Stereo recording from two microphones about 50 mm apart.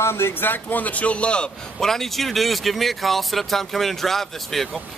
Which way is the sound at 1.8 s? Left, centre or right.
Centre.